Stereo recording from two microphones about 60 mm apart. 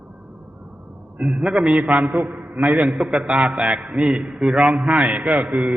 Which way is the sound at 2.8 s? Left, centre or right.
Centre.